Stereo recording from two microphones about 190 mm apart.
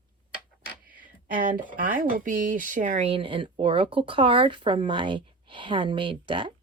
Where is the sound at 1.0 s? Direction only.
45° right (ahead or behind).